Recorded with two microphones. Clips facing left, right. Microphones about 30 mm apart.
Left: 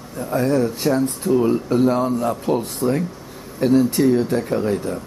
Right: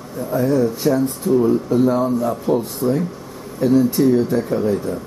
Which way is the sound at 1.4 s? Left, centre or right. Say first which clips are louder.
Right 3 dB; left.